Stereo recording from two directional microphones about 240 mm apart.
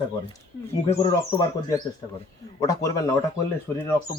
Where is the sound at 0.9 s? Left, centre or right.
Centre.